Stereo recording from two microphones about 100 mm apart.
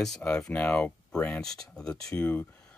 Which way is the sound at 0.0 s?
10° left (ahead or behind).